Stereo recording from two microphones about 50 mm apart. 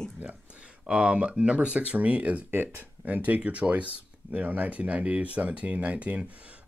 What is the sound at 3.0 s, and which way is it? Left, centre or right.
Speech, right.